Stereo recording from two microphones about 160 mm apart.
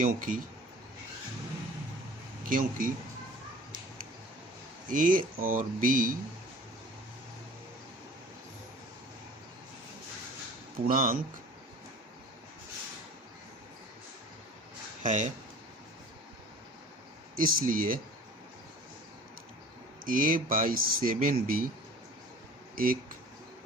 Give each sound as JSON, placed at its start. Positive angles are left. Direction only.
{"t": 0.0, "sound": "speech", "side_deg": -55}
{"t": 2.5, "sound": "speech", "side_deg": -60}
{"t": 4.9, "sound": "speech", "side_deg": -55}
{"t": 10.8, "sound": "speech", "side_deg": -60}
{"t": 15.0, "sound": "speech", "side_deg": -50}
{"t": 17.3, "sound": "speech", "side_deg": -60}
{"t": 20.1, "sound": "speech", "side_deg": -60}
{"t": 22.7, "sound": "speech", "side_deg": -60}